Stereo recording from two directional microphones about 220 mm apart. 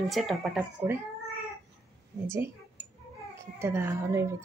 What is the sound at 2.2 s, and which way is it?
A child's voice, 10° right (ahead or behind).